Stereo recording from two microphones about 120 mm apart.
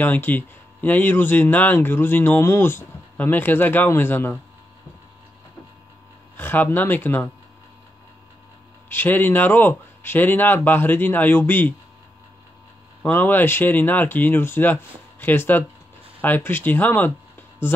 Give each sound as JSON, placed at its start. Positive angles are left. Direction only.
{"t": 0.0, "sound": "speech", "side_deg": 15}
{"t": 6.3, "sound": "speech", "side_deg": 15}
{"t": 8.8, "sound": "speech", "side_deg": 15}
{"t": 13.0, "sound": "speech", "side_deg": 15}